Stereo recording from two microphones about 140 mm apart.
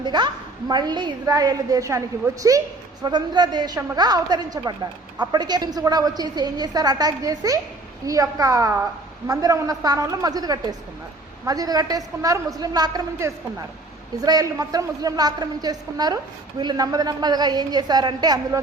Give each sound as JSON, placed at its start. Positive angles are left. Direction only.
{"t": 0.0, "sound": "a woman's voice", "side_deg": -35}